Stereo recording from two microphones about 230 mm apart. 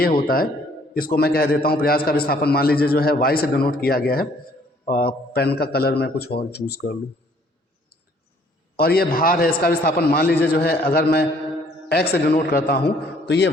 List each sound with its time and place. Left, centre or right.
0.9 s a man's voice: left
8.7 s a man's voice: left